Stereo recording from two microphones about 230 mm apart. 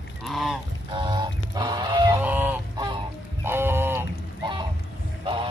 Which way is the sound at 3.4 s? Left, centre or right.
Centre.